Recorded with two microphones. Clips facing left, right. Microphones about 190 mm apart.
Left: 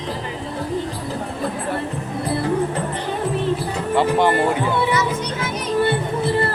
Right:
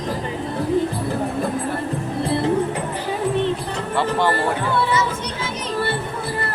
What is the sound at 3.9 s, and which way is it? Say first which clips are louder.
Music: left 3 dB; 15° left (ahead or behind).